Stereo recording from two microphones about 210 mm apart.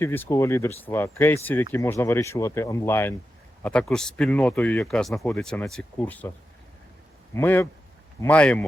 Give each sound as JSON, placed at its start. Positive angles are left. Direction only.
{"t": 0.0, "sound": "speech", "side_deg": 10}
{"t": 7.3, "sound": "speech", "side_deg": 10}